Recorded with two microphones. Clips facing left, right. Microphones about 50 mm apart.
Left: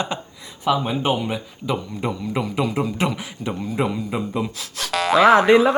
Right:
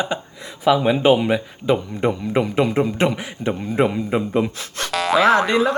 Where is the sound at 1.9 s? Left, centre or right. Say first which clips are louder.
Right 5 dB; right.